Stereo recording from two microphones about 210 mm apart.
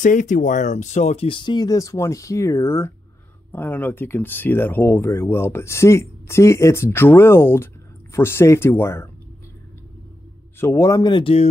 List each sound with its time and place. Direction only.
0.0 s speech: 40° left (ahead or behind); by 9.1 s 10° left (ahead or behind)
10.6 s speech: 10° left (ahead or behind)